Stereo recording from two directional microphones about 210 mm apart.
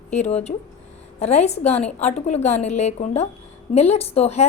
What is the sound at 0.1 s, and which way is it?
A woman's voice, 30° left (ahead or behind).